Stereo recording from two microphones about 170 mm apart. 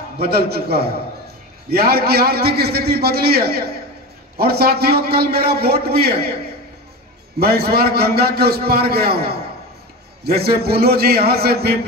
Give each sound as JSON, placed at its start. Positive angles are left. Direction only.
{"t": 0.2, "sound": "a man's voice", "side_deg": -65}
{"t": 7.3, "sound": "a man's voice", "side_deg": -65}